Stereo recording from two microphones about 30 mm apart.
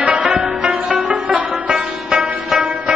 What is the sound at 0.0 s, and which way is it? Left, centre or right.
Music, right.